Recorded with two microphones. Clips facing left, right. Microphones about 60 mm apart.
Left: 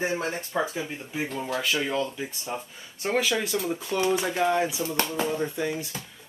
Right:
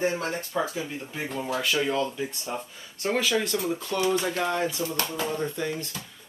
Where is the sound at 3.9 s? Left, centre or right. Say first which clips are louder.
Left 1 dB; centre.